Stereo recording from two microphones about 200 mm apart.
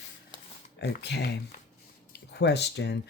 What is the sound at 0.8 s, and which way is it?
Speech, 55° left (ahead or behind).